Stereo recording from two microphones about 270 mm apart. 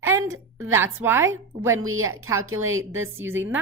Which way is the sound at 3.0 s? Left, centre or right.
Centre.